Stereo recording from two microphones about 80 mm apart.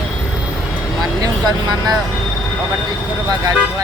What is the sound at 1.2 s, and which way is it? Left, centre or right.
Speech, right.